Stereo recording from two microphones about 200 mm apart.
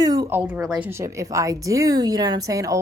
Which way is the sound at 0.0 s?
20° right (ahead or behind).